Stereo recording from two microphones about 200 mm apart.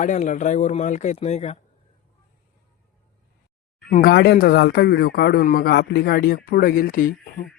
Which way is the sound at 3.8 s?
45° left (ahead or behind).